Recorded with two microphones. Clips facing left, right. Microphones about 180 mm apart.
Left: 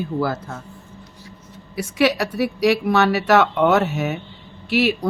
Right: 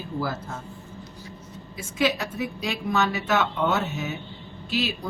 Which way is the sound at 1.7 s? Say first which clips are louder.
Left 6 dB; 75° left (ahead or behind).